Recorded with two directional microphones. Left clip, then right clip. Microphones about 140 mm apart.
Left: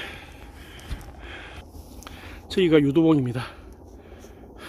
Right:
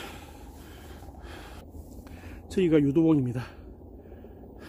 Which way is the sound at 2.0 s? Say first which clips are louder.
Left 10 dB; centre (ahead or behind).